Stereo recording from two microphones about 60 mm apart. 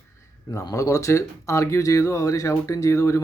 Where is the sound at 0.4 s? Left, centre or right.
Left.